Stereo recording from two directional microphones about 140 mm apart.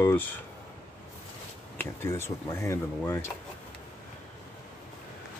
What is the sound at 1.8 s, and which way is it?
Speech, 20° left (ahead or behind).